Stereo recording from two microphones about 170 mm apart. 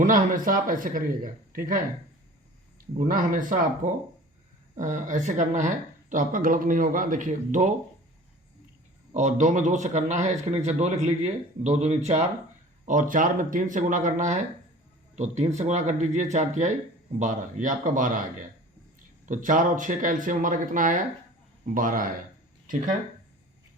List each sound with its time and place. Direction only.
0.0 s a man's voice: 50° right (ahead or behind)
9.1 s a man's voice: 45° right (ahead or behind)
12.8 s a man's voice: 50° right (ahead or behind)